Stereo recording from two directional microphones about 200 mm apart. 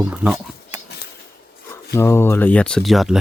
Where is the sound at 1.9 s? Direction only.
10° left (ahead or behind).